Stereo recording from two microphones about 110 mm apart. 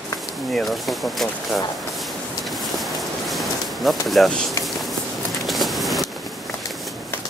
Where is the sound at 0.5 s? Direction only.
Centre (ahead or behind).